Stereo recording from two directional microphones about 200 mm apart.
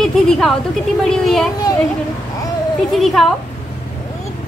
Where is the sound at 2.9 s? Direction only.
Centre (ahead or behind).